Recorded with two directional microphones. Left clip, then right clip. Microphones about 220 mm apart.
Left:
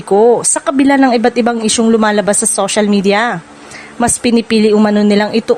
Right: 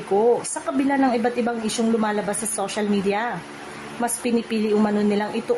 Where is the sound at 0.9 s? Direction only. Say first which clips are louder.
Left 10 dB; 45° left (ahead or behind).